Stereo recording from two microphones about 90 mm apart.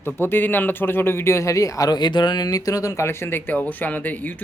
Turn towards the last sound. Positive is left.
turn(degrees=20)  # may be behind; listen again after turning